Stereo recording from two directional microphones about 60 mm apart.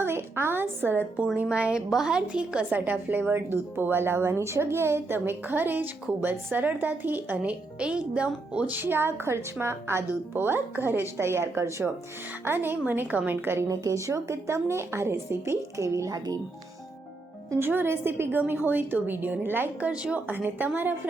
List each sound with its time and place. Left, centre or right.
0.0 s a woman's voice: right
1.5 s a woman's voice: centre; by 7.5 s right
7.8 s a woman's voice: centre
8.7 s a woman's voice: right
12.5 s a woman's voice: right
13.7 s a woman's voice: right
17.6 s a woman's voice: right
19.8 s a woman's voice: centre